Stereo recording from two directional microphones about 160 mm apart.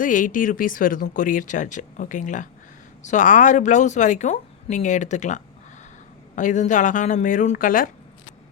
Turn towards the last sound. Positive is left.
turn(degrees=60)  # may be behind; listen again after turning